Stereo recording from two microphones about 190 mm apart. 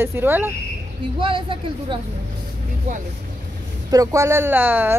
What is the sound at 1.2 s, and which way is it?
Speech, 25° right (ahead or behind).